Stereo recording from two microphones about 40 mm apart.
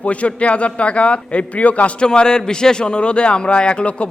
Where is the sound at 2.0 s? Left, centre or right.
Centre.